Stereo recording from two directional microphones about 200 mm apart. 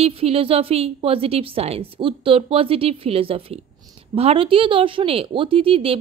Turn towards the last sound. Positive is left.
turn(degrees=-30)  # may be behind; listen again after turning